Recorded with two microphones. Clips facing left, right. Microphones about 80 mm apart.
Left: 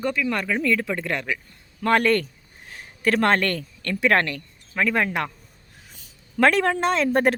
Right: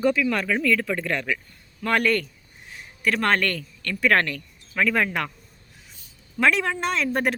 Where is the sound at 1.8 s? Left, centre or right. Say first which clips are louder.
Left 3 dB; left.